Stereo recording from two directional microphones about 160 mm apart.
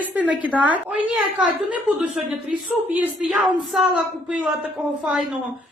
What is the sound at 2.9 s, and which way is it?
Speech, 10° right (ahead or behind).